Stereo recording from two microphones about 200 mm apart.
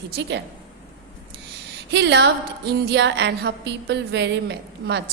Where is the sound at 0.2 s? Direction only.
60° right (ahead or behind).